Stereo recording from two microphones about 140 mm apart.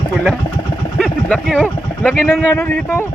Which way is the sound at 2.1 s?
10° left (ahead or behind).